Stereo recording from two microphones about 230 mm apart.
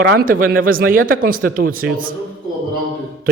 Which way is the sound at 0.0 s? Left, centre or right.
Right.